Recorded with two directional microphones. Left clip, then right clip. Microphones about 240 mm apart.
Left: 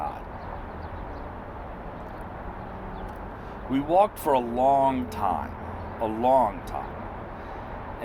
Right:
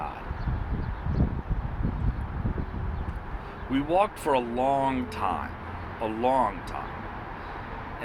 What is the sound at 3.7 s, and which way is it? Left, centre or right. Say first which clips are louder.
Speech: left 3 dB; left.